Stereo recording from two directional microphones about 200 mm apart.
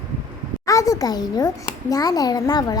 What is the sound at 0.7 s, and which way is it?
A child's voice, 15° left (ahead or behind).